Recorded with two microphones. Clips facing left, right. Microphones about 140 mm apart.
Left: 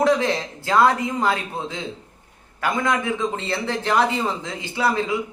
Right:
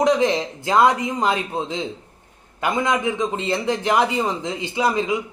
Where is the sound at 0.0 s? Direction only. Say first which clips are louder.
Right 2 dB; 15° right (ahead or behind).